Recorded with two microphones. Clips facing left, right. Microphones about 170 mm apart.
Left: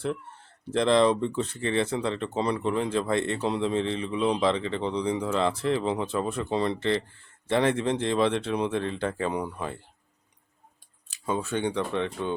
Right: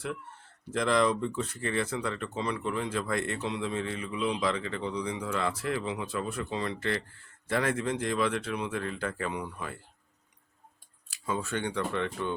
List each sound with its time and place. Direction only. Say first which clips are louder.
0.6 s speech: left 5 dB; 30° left (ahead or behind)
11.1 s speech: left 4 dB; 20° left (ahead or behind)